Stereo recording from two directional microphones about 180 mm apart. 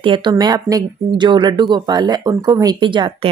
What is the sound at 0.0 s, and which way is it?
Speech, 25° right (ahead or behind).